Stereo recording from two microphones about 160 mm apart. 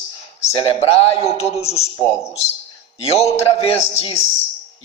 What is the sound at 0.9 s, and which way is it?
Speech, 40° left (ahead or behind).